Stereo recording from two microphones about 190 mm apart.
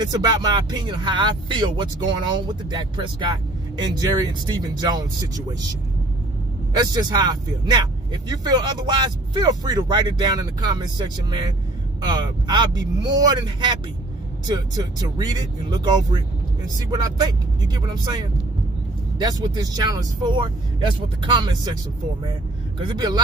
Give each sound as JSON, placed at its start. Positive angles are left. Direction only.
{"t": 0.0, "sound": "speech", "side_deg": -20}
{"t": 6.8, "sound": "speech", "side_deg": -20}
{"t": 22.9, "sound": "speech", "side_deg": -20}